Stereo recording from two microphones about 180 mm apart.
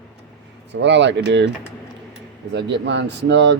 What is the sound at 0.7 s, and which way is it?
Speech, 75° right (ahead or behind).